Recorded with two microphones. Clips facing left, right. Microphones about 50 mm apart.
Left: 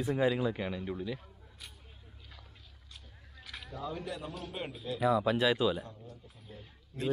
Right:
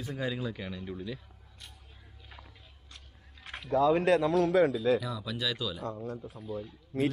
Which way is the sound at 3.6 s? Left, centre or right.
Right.